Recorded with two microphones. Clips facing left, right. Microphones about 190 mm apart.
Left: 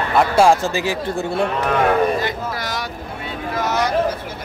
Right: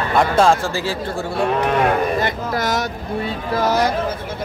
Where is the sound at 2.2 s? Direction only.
50° right (ahead or behind); by 3.8 s 35° right (ahead or behind).